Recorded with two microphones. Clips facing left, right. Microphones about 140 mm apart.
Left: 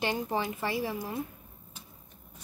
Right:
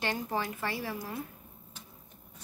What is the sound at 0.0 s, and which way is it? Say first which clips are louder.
A woman's voice: left 3 dB; 20° left (ahead or behind).